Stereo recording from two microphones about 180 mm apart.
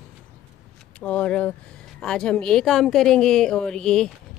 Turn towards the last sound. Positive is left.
turn(degrees=5)  # may be behind; listen again after turning